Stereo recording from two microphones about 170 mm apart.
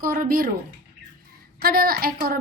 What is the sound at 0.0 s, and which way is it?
Speech, 55° right (ahead or behind).